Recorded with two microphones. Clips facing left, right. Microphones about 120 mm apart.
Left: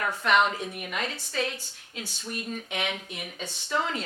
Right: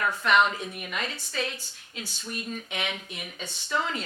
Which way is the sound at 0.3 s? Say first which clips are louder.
Even; 55° left (ahead or behind).